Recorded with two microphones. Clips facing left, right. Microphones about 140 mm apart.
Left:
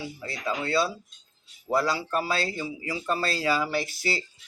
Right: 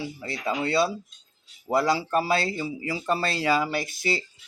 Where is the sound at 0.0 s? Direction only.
25° right (ahead or behind).